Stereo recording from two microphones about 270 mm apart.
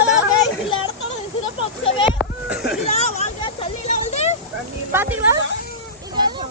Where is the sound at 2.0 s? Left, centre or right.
Centre.